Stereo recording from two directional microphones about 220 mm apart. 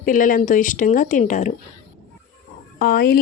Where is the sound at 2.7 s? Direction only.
40° left (ahead or behind).